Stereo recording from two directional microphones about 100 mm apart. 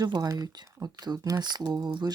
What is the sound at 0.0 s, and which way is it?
Speech, 40° right (ahead or behind).